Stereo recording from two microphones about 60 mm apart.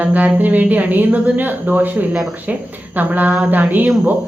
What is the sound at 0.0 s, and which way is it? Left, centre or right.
Speech, right.